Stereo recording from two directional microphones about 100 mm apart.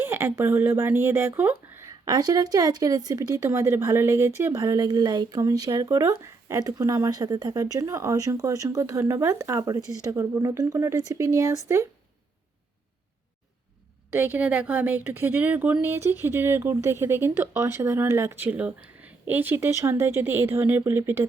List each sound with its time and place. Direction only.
0.0 s a woman's voice: 25° right (ahead or behind)
1.9 s speech: 40° right (ahead or behind)
14.1 s a woman's voice: 20° right (ahead or behind)